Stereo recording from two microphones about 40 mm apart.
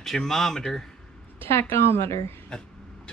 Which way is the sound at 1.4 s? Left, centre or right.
Left.